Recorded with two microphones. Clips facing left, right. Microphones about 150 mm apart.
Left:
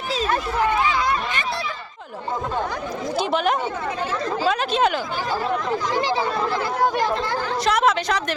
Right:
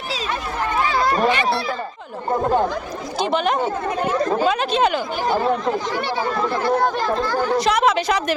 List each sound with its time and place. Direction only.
0.6 s a child's voice: 45° right (ahead or behind)
3.2 s a woman's voice: 5° left (ahead or behind)
7.6 s a woman's voice: centre (ahead or behind)